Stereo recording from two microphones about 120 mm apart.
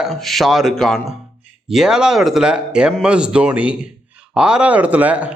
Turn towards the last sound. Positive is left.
turn(degrees=-10)  # may be behind; listen again after turning